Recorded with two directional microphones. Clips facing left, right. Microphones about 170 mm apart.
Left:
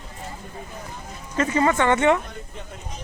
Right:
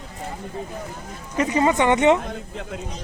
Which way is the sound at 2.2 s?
90° right.